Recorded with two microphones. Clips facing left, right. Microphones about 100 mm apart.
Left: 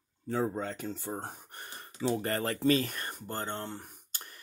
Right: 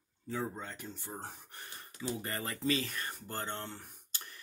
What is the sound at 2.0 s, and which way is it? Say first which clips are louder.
Speech: left 8 dB; 70° left (ahead or behind).